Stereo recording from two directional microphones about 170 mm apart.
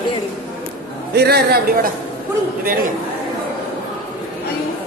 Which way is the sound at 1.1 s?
70° right (ahead or behind).